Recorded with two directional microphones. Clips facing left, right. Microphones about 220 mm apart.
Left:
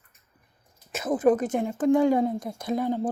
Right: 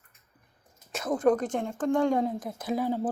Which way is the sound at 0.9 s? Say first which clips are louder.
Left 3 dB; 5° left (ahead or behind).